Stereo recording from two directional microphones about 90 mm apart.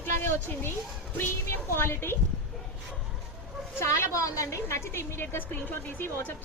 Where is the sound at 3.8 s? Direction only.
30° left (ahead or behind).